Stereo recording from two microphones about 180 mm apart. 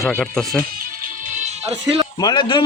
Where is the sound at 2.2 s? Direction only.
25° left (ahead or behind).